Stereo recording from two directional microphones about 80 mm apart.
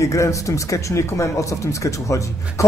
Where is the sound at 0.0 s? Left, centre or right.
Left.